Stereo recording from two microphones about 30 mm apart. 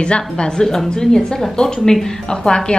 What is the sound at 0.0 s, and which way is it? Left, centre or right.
A woman's voice, left.